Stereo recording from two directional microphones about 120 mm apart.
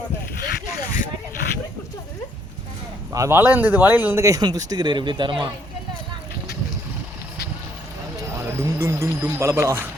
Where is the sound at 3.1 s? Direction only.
20° right (ahead or behind).